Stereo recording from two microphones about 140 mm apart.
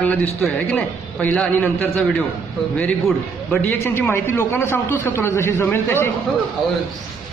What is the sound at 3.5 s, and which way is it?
A man's voice, 15° left (ahead or behind).